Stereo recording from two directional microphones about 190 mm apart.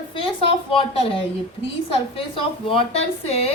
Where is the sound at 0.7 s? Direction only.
30° left (ahead or behind).